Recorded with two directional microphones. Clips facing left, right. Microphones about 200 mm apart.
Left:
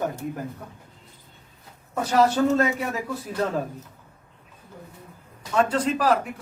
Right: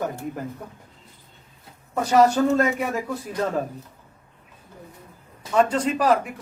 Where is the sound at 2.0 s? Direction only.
Centre (ahead or behind).